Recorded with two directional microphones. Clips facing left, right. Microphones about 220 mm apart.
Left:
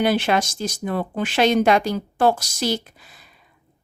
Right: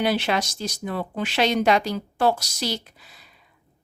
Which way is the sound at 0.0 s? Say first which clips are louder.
Left 4 dB; 50° left (ahead or behind).